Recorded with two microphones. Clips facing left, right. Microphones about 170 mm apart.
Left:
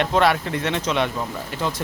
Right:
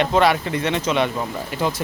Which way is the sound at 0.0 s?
Centre (ahead or behind).